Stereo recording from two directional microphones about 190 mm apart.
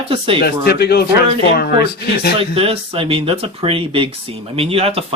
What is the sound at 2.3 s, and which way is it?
Speech, 30° right (ahead or behind).